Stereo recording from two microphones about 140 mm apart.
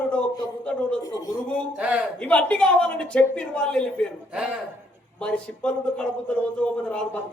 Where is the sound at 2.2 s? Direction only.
10° left (ahead or behind).